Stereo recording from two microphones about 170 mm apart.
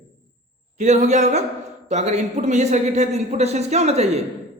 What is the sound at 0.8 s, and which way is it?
A man's voice, 45° right (ahead or behind).